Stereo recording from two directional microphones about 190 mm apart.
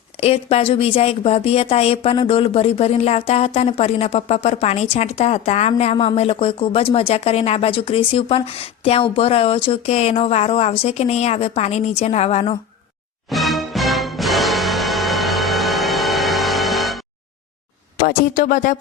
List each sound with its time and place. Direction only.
0.2 s a woman's voice: 30° left (ahead or behind)
13.3 s music: centre (ahead or behind)
18.3 s speech: 45° left (ahead or behind)